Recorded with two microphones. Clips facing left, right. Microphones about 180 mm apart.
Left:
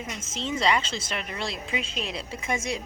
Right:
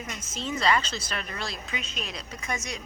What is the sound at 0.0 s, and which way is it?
A woman's voice, 25° left (ahead or behind).